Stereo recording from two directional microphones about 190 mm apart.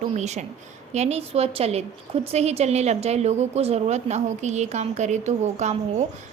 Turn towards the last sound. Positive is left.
turn(degrees=-35)  # may be behind; listen again after turning